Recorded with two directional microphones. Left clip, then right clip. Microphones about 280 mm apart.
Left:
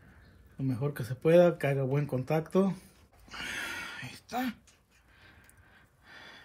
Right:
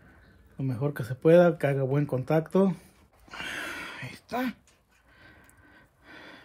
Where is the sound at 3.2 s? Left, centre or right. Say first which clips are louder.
Right 2 dB; right.